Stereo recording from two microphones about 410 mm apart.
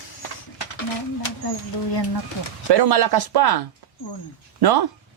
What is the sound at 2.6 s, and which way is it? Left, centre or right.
Speech, right.